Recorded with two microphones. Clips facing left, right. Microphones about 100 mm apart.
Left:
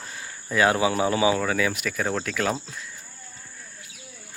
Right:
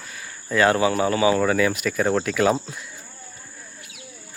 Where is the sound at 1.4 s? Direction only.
Centre (ahead or behind).